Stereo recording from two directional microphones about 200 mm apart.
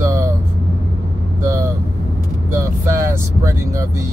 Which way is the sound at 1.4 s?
15° right (ahead or behind).